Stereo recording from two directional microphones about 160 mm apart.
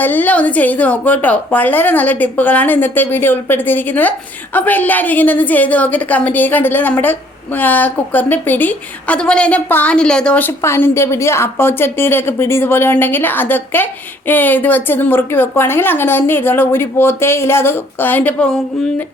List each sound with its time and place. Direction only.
0.0 s a woman's voice: 10° left (ahead or behind)